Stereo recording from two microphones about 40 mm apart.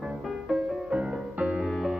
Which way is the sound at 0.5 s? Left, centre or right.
Right.